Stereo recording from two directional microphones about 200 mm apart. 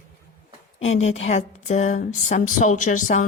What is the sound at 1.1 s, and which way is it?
A woman's voice, 35° left (ahead or behind).